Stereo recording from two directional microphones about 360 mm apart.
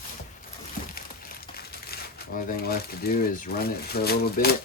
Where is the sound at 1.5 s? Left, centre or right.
Left.